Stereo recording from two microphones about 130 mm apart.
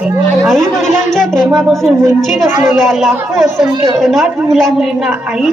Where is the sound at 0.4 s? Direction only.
Centre (ahead or behind).